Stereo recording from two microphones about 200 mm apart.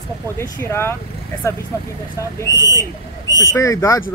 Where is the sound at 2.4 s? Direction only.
15° left (ahead or behind).